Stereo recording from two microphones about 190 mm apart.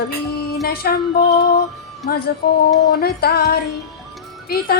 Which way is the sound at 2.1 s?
50° left (ahead or behind).